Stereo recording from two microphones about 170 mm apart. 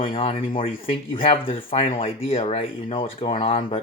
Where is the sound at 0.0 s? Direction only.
35° left (ahead or behind).